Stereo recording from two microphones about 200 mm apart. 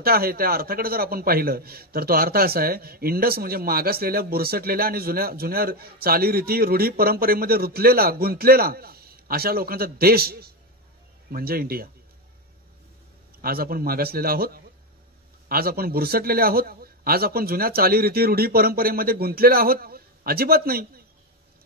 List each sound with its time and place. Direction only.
0.0 s a man's voice: 50° right (ahead or behind)
13.4 s a man's voice: 50° right (ahead or behind)